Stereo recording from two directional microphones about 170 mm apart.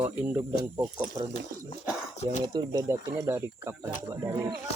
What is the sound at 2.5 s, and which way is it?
Speech, 20° right (ahead or behind).